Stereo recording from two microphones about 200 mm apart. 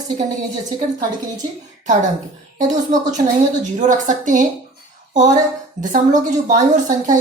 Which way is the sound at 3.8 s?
40° right (ahead or behind).